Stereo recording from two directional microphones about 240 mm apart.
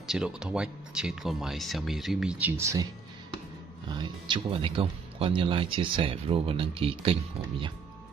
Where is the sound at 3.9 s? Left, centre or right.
Centre.